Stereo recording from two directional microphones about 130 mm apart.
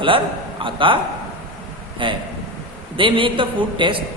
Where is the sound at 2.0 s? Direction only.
40° right (ahead or behind).